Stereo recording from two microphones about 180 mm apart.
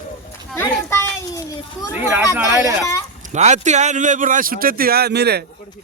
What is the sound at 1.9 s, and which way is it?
Speech, 10° right (ahead or behind).